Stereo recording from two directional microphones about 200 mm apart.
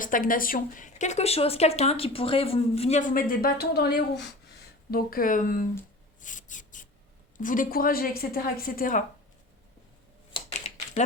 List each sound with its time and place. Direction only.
0.0 s a woman's voice: 45° left (ahead or behind)
6.1 s a sound: 40° left (ahead or behind)
7.3 s a woman's voice: 40° left (ahead or behind)